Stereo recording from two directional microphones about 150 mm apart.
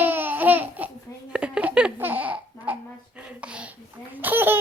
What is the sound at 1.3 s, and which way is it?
Baby laughter, 5° right (ahead or behind).